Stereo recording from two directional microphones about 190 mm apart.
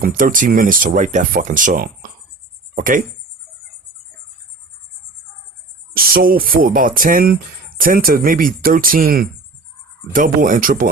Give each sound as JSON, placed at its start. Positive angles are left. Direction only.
{"t": 0.0, "sound": "speech", "side_deg": -45}
{"t": 5.9, "sound": "speech", "side_deg": -50}